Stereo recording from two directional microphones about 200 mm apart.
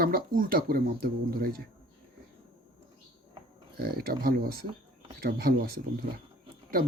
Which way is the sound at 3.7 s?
50° right (ahead or behind).